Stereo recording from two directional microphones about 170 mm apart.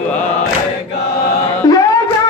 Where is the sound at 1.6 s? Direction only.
20° left (ahead or behind).